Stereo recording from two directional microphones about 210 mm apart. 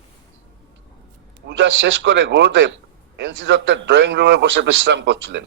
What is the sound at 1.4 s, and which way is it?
A man's voice, 60° right (ahead or behind).